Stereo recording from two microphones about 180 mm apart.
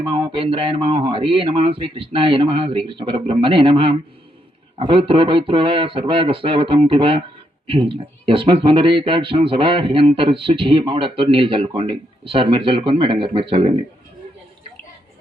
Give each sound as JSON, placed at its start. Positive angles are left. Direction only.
{"t": 0.0, "sound": "speech", "side_deg": -30}